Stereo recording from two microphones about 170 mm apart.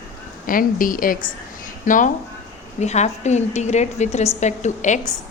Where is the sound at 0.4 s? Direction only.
55° left (ahead or behind).